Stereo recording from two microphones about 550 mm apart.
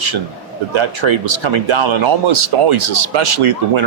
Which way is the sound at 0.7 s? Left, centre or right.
Right.